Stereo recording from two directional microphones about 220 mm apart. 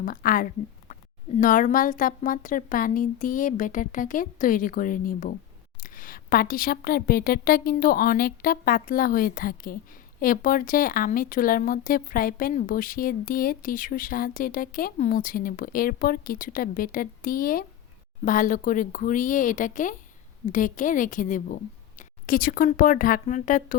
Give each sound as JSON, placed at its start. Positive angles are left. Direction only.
{"t": 0.0, "sound": "a woman's voice", "side_deg": 40}